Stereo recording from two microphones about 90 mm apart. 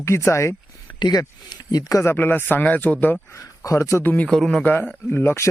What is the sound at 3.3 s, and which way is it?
Speech, 35° left (ahead or behind).